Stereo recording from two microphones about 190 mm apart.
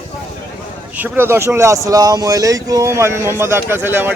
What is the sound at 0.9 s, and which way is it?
Speech, 10° right (ahead or behind).